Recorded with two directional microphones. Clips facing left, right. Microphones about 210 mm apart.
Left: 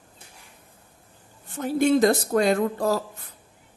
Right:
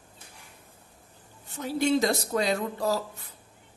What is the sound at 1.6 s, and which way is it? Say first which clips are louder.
Speech: left 5 dB; 50° left (ahead or behind).